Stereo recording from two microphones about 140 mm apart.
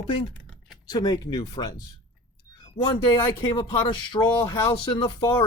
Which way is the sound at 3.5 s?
30° left (ahead or behind).